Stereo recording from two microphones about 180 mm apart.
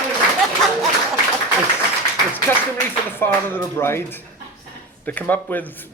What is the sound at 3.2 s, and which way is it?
Speech, 15° left (ahead or behind).